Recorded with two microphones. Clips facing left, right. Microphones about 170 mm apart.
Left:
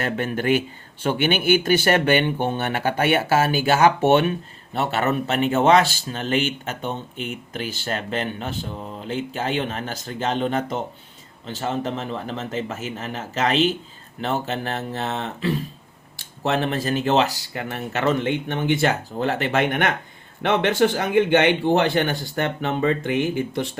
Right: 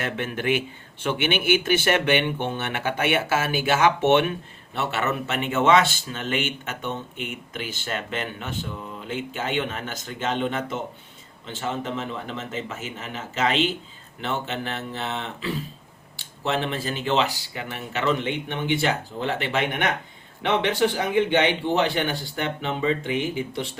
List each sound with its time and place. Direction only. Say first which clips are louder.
0.0 s speech: left 3 dB; 40° left (ahead or behind)